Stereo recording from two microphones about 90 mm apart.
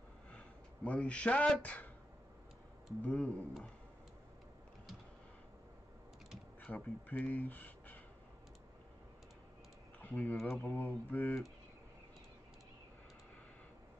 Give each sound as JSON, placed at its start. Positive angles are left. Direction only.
{"t": 0.3, "sound": "speech", "side_deg": 15}
{"t": 3.0, "sound": "speech", "side_deg": 15}
{"t": 6.6, "sound": "speech", "side_deg": 20}
{"t": 9.9, "sound": "typing", "side_deg": 20}
{"t": 10.6, "sound": "speech", "side_deg": 20}